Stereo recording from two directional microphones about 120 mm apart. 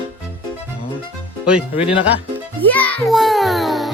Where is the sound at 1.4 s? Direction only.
5° right (ahead or behind).